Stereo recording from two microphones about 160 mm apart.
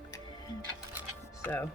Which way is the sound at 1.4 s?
15° left (ahead or behind).